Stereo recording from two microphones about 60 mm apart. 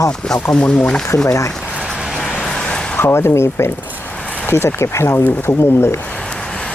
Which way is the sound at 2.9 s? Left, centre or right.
Left.